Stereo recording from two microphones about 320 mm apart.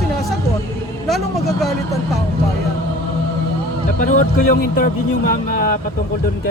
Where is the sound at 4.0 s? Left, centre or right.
Left.